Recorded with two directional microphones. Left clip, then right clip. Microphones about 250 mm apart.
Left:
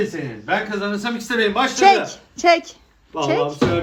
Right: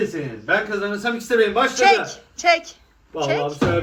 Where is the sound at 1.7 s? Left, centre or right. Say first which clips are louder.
Left 2 dB; left.